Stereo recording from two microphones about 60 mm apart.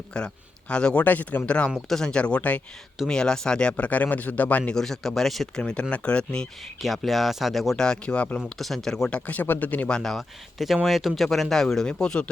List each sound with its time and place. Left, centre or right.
0.1 s speech: centre
1.0 s speech: left
3.1 s speech: centre
4.7 s speech: centre
6.8 s speech: centre
7.9 s speech: centre
8.4 s speech: centre
9.0 s speech: left
9.9 s speech: centre